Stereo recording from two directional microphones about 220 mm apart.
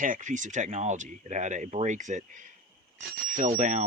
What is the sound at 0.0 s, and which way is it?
Speech, 35° right (ahead or behind).